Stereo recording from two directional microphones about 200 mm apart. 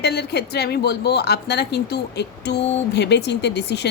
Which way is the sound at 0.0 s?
55° left (ahead or behind).